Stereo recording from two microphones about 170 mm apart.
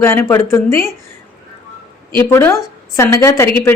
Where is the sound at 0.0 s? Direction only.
15° left (ahead or behind).